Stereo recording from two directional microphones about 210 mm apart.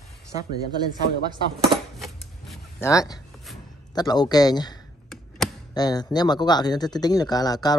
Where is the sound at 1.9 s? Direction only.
Centre (ahead or behind).